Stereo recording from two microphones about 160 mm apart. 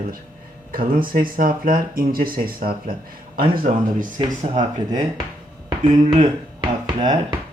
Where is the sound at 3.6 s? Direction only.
55° right (ahead or behind).